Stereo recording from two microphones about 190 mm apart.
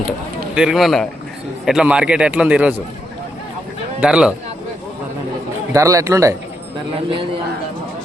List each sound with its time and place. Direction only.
0.5 s a man's voice: 5° right (ahead or behind)
4.0 s a man's voice: 5° right (ahead or behind)
5.7 s speech: 15° right (ahead or behind)